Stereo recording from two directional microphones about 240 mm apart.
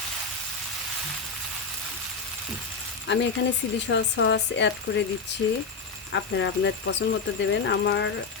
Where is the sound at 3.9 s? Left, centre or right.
Left.